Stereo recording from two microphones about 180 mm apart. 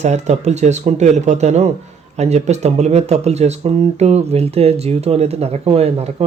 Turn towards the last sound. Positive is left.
turn(degrees=-35)  # may be behind; listen again after turning